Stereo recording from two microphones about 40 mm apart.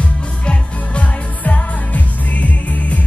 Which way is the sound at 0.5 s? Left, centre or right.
Left.